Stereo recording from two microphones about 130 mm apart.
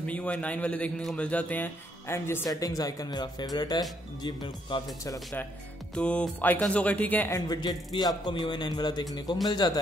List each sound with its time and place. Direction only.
0.0 s a man's voice: 10° left (ahead or behind); by 4.8 s 35° left (ahead or behind)
5.0 s speech: 25° left (ahead or behind)
5.9 s a man's voice: 10° left (ahead or behind)
7.3 s a man's voice: 35° left (ahead or behind)